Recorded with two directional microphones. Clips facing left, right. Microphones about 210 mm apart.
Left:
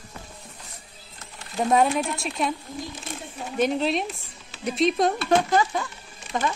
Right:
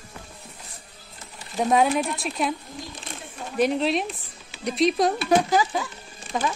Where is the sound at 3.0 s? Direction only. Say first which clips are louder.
Left 2 dB; centre (ahead or behind).